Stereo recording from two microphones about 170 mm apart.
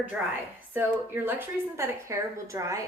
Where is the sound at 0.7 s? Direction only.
15° right (ahead or behind).